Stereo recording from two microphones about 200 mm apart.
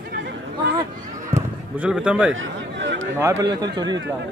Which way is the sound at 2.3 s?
65° right (ahead or behind).